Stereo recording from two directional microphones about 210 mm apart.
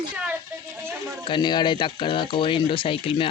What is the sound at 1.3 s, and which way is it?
Speech, 20° left (ahead or behind).